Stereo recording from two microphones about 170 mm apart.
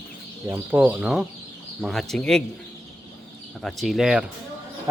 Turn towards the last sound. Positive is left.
turn(degrees=-5)  # may be behind; listen again after turning